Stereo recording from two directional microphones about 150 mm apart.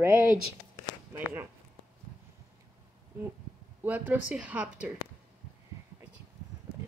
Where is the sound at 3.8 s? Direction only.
10° right (ahead or behind).